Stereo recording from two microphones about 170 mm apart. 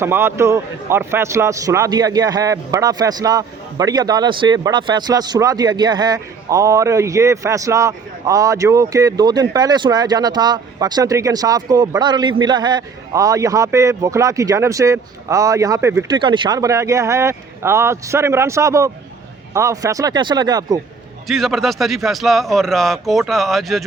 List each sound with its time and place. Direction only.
0.0 s a man's voice: 15° right (ahead or behind)
16.0 s a man's voice: 25° right (ahead or behind)
21.2 s speech: centre (ahead or behind)